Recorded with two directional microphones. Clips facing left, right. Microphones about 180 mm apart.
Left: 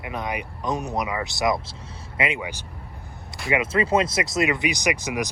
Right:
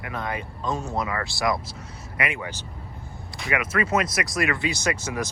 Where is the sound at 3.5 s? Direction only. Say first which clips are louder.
Left 3 dB; 25° left (ahead or behind).